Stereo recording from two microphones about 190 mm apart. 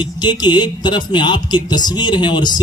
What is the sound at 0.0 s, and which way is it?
Speech, 25° left (ahead or behind).